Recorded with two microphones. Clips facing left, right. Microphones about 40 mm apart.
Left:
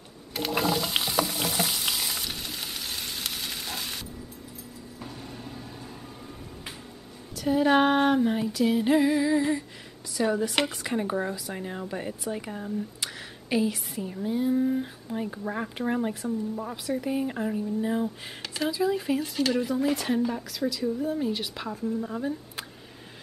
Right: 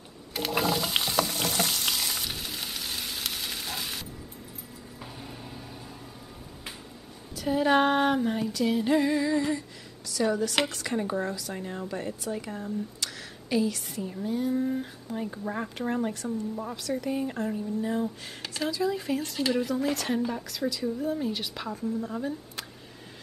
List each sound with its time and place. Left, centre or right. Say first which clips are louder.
0.3 s frying: left 1 dB; centre
5.0 s vehicle: left 2 dB; centre
7.3 s a sound: left 2 dB; centre
8.8 s a woman's voice: left 2 dB; centre
13.5 s a woman's voice: left 1 dB; centre
16.7 s a woman's voice: left 2 dB; centre